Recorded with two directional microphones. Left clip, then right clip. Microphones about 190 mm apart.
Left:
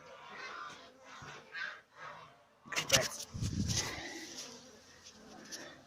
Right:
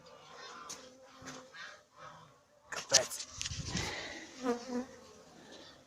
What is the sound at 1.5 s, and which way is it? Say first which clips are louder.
Goose: left 10 dB; 30° left (ahead or behind).